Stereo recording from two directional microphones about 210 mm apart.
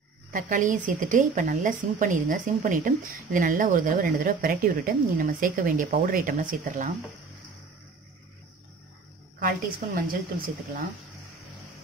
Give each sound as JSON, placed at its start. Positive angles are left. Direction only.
{"t": 0.3, "sound": "a woman's voice", "side_deg": -40}
{"t": 9.4, "sound": "a woman's voice", "side_deg": -40}